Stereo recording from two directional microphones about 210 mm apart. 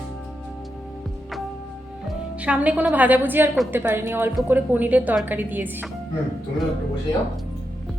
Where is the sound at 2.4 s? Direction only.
5° right (ahead or behind).